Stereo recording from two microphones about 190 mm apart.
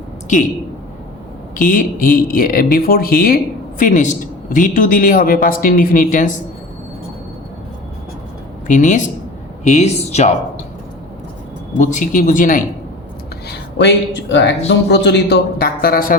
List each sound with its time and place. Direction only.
1.5 s speech: 45° left (ahead or behind)
8.6 s speech: 40° left (ahead or behind)
11.8 s speech: 40° left (ahead or behind)
13.5 s speech: 65° left (ahead or behind); by 16.1 s 50° left (ahead or behind)